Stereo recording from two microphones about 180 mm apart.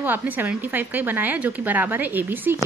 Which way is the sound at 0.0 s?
10° right (ahead or behind).